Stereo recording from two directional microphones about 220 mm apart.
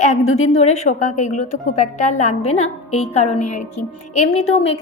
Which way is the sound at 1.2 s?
90° left.